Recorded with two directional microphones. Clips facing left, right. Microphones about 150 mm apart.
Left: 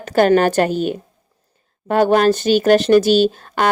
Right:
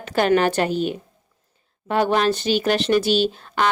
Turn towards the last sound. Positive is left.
turn(degrees=45)  # may be behind; listen again after turning